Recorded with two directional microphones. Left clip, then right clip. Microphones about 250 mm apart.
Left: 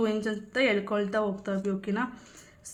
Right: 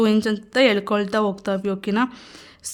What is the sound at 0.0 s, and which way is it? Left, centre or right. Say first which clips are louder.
A woman's voice: right 9 dB; right.